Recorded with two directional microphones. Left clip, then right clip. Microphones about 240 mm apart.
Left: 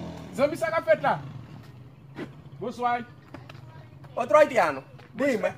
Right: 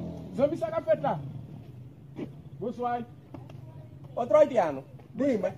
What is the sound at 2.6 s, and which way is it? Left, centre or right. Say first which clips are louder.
Speech: left 4 dB; centre.